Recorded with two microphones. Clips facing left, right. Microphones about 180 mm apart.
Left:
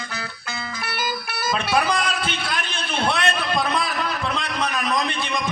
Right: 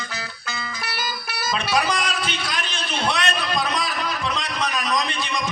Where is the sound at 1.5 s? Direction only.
55° left (ahead or behind).